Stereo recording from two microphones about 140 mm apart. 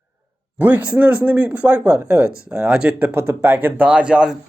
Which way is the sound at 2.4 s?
5° right (ahead or behind).